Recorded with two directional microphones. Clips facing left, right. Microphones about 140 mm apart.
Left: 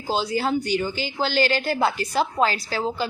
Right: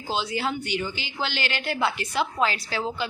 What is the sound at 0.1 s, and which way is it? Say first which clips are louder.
A woman's voice: left 5 dB; 40° left (ahead or behind).